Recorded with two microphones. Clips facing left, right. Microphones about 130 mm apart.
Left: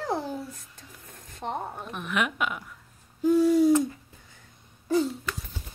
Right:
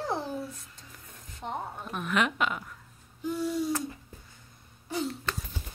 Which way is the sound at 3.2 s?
90° left.